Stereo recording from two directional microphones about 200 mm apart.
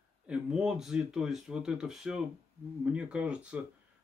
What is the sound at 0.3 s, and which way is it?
Speech, 5° right (ahead or behind).